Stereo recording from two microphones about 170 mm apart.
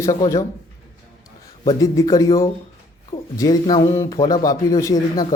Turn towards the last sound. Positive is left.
turn(degrees=20)  # may be behind; listen again after turning